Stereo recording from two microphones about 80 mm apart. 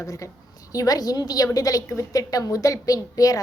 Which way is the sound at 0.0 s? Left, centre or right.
Left.